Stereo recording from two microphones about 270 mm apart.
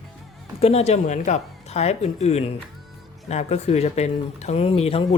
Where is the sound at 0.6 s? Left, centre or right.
Left.